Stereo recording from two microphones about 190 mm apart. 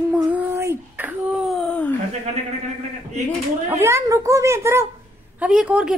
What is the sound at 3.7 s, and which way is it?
A woman's voice, 15° right (ahead or behind).